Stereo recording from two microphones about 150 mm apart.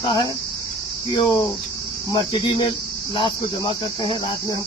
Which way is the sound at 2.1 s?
35° left (ahead or behind).